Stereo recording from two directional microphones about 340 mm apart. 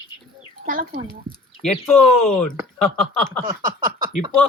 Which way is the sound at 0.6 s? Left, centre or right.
Right.